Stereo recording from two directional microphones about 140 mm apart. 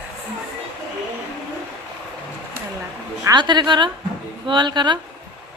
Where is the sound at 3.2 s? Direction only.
30° right (ahead or behind).